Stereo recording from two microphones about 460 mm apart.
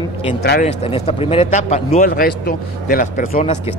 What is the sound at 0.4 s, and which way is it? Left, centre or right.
A man's voice, centre.